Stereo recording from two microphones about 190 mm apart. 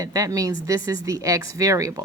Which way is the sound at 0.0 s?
20° right (ahead or behind).